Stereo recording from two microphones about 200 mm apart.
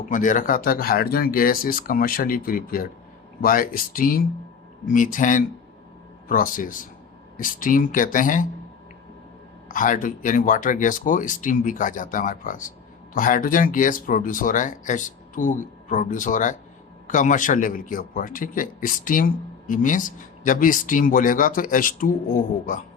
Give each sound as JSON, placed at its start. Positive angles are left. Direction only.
{"t": 0.1, "sound": "speech", "side_deg": 40}
{"t": 9.6, "sound": "speech", "side_deg": 40}